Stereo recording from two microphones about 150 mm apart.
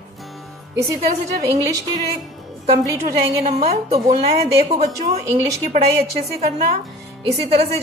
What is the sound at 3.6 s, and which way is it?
Speech, 45° right (ahead or behind).